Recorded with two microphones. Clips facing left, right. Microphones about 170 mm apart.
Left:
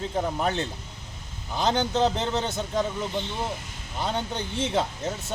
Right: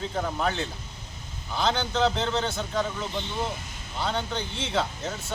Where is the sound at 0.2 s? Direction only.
20° left (ahead or behind).